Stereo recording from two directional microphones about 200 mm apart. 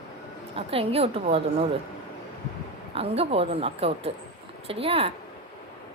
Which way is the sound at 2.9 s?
30° right (ahead or behind).